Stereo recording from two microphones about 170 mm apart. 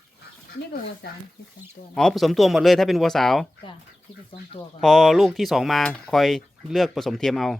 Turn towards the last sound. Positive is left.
turn(degrees=0)  # may be behind; listen again after turning